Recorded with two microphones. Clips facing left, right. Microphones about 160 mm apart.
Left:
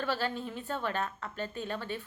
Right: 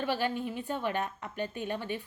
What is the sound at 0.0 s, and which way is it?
A woman's voice, 15° right (ahead or behind).